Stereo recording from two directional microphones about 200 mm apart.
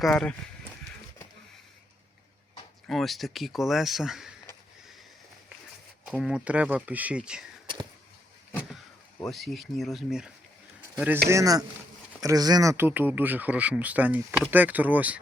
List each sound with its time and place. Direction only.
0.0 s speech: 5° left (ahead or behind)
2.8 s speech: centre (ahead or behind)
6.1 s speech: 5° right (ahead or behind)
9.2 s speech: centre (ahead or behind)